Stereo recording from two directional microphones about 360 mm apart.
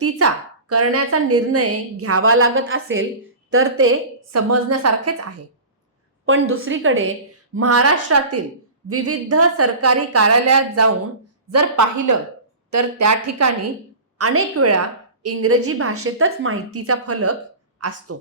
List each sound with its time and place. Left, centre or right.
0.0 s a woman's voice: right